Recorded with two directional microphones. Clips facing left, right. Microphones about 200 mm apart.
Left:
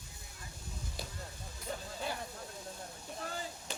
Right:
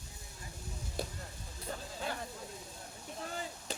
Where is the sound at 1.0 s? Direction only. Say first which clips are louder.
Right 7 dB; 50° right (ahead or behind).